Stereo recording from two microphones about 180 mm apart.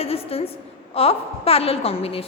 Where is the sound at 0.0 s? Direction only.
30° left (ahead or behind).